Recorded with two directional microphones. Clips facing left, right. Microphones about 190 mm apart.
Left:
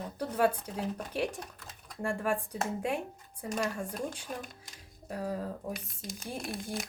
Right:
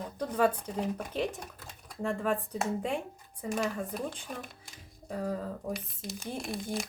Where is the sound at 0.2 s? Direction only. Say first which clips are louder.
Right 1 dB; 10° left (ahead or behind).